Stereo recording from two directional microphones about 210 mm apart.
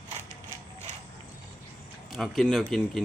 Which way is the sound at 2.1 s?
Centre (ahead or behind).